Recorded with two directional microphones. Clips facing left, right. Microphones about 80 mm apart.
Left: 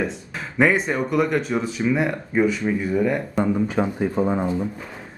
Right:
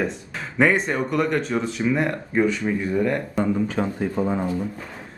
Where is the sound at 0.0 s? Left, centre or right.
Centre; by 4.7 s left.